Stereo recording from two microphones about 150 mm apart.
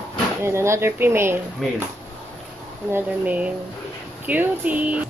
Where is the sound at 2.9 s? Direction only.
10° right (ahead or behind).